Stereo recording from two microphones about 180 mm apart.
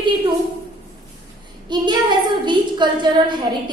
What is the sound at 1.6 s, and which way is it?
A woman's voice, 25° right (ahead or behind).